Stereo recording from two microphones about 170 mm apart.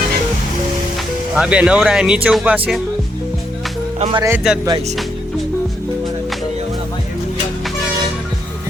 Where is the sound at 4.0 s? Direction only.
35° right (ahead or behind).